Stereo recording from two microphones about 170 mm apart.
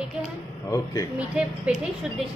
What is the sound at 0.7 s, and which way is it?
Speech, 20° left (ahead or behind).